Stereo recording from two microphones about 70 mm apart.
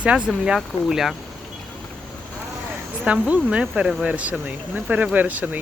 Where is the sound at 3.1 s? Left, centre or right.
Centre.